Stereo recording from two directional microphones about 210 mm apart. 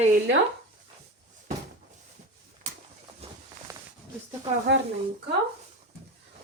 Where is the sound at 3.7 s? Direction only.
15° right (ahead or behind).